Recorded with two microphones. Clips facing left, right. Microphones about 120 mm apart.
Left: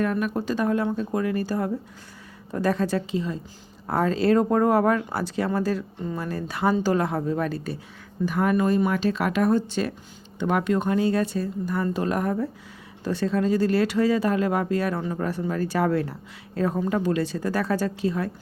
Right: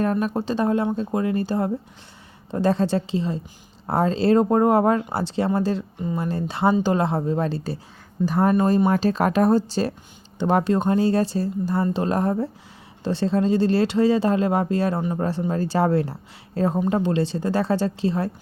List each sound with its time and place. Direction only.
0.0 s speech: 30° right (ahead or behind)